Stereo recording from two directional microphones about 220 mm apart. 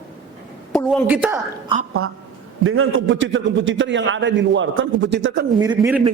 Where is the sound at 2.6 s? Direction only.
70° right (ahead or behind).